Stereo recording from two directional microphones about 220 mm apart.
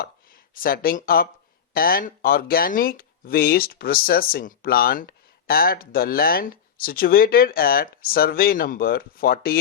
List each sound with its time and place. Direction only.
0.0 s speech: 40° left (ahead or behind)